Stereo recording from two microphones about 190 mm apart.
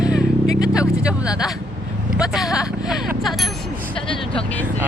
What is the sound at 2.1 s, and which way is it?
Speech, centre (ahead or behind).